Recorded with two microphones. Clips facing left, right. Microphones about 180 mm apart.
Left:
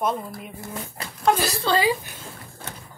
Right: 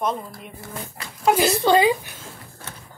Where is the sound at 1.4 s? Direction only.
20° right (ahead or behind).